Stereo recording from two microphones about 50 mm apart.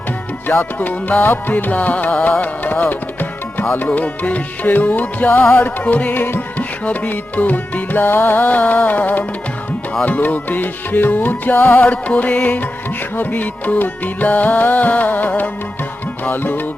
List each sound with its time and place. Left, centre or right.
0.4 s music: left
6.8 s music: left
11.9 s music: left